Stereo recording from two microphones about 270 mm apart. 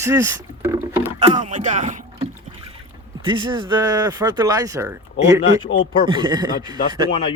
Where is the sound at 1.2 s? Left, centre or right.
Right.